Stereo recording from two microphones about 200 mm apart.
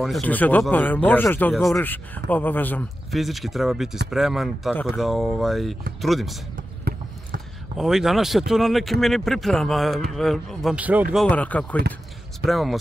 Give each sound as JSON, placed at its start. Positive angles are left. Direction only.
{"t": 0.0, "sound": "a man's voice", "side_deg": 5}
{"t": 6.5, "sound": "basketball bounce", "side_deg": -45}
{"t": 7.7, "sound": "a man's voice", "side_deg": 0}
{"t": 11.2, "sound": "a man's voice", "side_deg": 5}